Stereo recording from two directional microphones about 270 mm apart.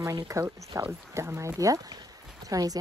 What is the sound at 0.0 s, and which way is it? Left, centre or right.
Speech, centre.